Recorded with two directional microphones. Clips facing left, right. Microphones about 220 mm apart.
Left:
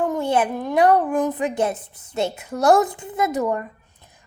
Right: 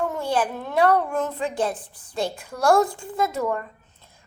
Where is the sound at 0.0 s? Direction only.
20° left (ahead or behind).